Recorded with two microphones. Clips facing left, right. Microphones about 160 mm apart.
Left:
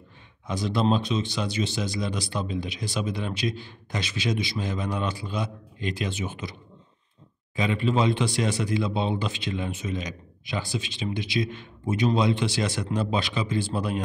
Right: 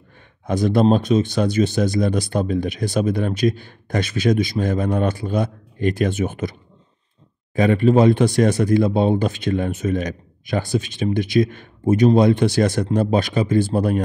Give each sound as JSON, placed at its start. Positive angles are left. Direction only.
{"t": 0.5, "sound": "speech", "side_deg": -50}
{"t": 7.5, "sound": "speech", "side_deg": -50}